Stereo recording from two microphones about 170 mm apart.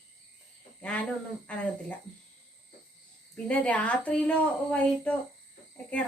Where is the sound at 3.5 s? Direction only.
10° left (ahead or behind).